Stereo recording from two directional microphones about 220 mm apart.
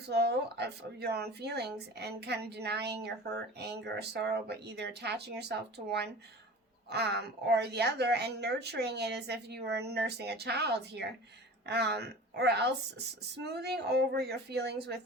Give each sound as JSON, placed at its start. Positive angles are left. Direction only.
{"t": 0.1, "sound": "a woman's voice", "side_deg": -50}